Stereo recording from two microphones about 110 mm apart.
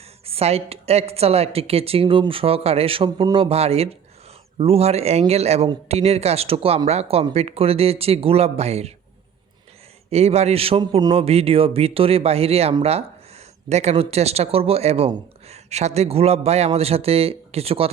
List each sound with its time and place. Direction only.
0.3 s a woman's voice: 65° right (ahead or behind)
10.1 s a woman's voice: 75° right (ahead or behind)
13.7 s speech: 85° right; by 17.8 s 65° right (ahead or behind)